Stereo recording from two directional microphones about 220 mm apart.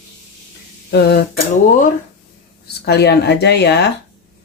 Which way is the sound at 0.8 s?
50° left (ahead or behind).